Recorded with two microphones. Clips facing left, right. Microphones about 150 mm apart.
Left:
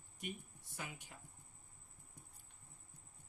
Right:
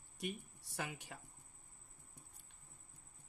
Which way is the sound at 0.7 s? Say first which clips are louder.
Right 5 dB; 90° right.